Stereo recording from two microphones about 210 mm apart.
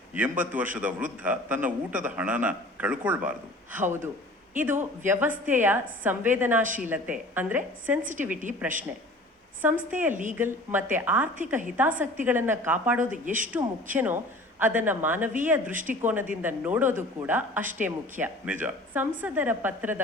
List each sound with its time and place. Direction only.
0.1 s a man's voice: 10° right (ahead or behind)
9.6 s a man's voice: 10° right (ahead or behind)